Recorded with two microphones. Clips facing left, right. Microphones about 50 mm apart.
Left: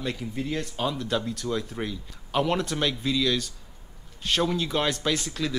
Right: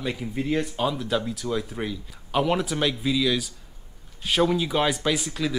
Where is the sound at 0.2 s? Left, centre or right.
Centre.